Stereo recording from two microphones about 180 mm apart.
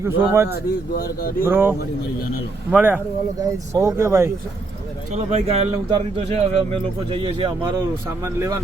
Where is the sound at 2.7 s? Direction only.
10° right (ahead or behind).